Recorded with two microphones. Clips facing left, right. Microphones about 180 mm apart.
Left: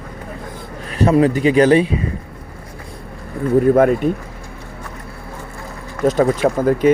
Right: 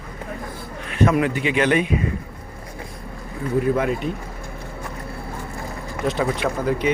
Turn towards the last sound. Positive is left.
turn(degrees=45)  # may be behind; listen again after turning